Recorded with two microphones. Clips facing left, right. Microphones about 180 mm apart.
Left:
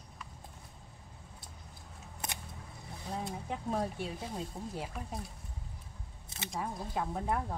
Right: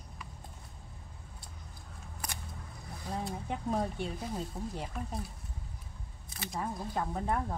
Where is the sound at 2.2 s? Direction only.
25° left (ahead or behind).